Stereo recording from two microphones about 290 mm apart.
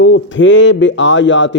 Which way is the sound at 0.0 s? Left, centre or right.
Left.